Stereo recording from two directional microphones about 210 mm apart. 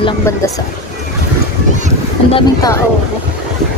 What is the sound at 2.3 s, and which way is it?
Speech, 25° left (ahead or behind).